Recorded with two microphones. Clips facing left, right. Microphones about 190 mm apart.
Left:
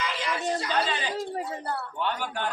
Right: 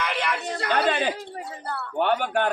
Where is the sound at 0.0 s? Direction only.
65° right (ahead or behind).